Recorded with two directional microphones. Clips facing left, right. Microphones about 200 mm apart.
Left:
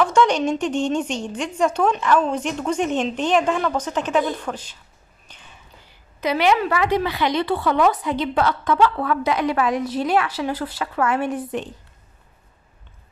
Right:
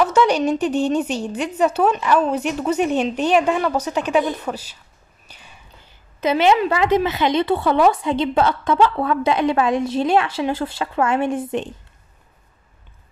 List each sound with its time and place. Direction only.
0.0 s a woman's voice: 5° right (ahead or behind)
5.3 s a sound: 10° right (ahead or behind)
6.2 s a woman's voice: 25° right (ahead or behind)